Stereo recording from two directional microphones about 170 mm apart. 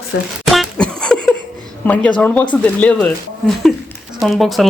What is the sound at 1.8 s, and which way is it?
Speech, 10° left (ahead or behind).